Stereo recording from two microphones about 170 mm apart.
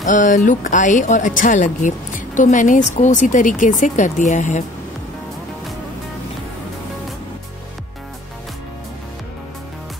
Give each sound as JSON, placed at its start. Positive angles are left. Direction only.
{"t": 0.0, "sound": "speech", "side_deg": 50}